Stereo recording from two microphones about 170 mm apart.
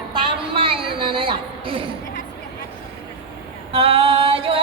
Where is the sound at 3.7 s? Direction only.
35° right (ahead or behind).